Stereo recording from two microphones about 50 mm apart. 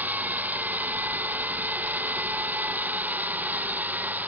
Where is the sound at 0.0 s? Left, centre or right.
Right.